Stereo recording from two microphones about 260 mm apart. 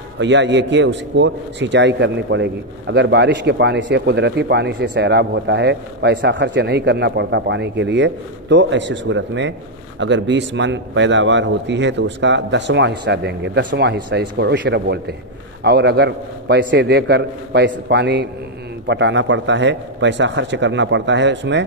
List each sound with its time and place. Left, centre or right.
0.2 s a man's voice: right